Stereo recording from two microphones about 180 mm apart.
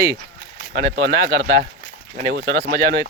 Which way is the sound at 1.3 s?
50° right (ahead or behind).